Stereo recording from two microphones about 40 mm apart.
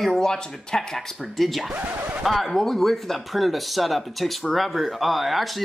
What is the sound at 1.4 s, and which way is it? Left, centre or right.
Speech, centre.